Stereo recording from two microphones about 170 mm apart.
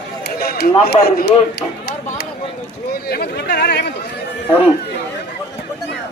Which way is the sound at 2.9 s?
70° left (ahead or behind).